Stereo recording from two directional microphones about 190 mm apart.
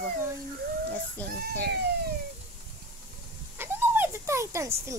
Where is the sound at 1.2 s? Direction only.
10° left (ahead or behind).